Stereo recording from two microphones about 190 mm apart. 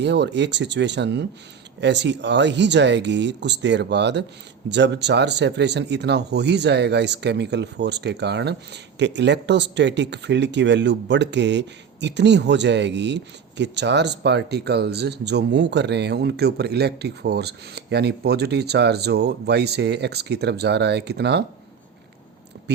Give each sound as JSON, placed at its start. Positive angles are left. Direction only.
{"t": 0.0, "sound": "speech", "side_deg": -65}